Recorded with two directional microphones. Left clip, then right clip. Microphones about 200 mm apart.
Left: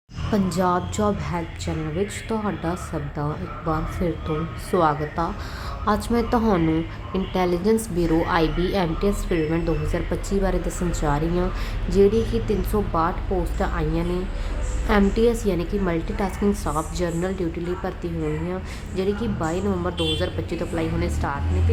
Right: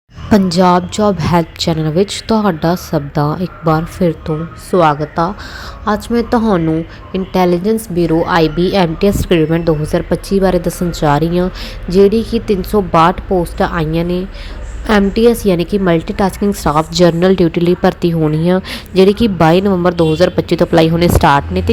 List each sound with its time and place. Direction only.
0.3 s a woman's voice: 30° right (ahead or behind)